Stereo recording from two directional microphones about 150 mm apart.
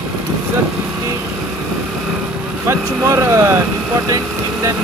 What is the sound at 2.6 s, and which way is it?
Speech, 20° right (ahead or behind).